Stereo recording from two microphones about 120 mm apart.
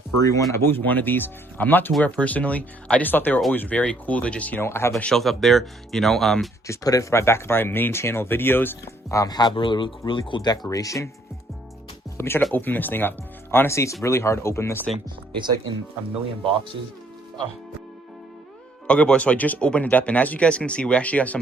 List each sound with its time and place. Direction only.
0.2 s speech: 30° left (ahead or behind)
5.0 s speech: centre (ahead or behind)
6.7 s speech: 30° left (ahead or behind)
10.7 s speech: 30° left (ahead or behind)
12.1 s music: 20° left (ahead or behind)
12.5 s speech: 15° left (ahead or behind)
14.9 s speech: 40° right (ahead or behind)
18.9 s speech: 10° left (ahead or behind)